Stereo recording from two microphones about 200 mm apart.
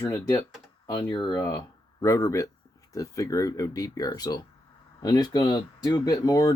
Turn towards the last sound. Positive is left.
turn(degrees=20)  # may be behind; listen again after turning